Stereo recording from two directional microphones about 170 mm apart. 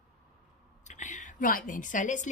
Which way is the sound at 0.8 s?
45° left (ahead or behind).